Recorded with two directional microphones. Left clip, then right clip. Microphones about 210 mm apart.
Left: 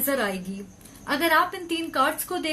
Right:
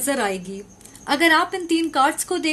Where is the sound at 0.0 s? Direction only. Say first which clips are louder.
Right 3 dB; 50° right (ahead or behind).